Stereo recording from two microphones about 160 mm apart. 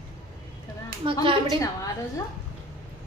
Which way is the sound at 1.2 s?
30° right (ahead or behind).